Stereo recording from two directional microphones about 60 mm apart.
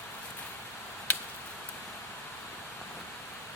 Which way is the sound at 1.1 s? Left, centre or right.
Left.